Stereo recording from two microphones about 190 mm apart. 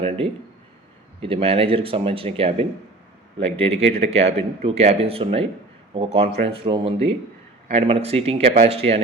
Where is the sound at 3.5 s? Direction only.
30° right (ahead or behind).